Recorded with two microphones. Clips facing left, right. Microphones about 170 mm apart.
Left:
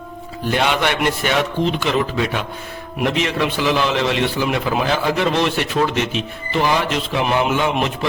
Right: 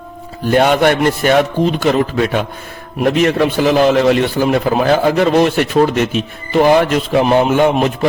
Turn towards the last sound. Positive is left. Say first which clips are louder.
# right 7 dB
turn(degrees=-50)  # may be behind; listen again after turning